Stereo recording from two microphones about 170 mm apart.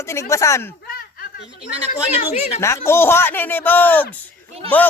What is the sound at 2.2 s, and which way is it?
Speech, 40° left (ahead or behind).